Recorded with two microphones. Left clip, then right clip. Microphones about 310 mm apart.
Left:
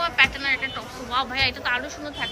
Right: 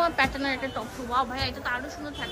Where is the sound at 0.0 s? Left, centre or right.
Centre.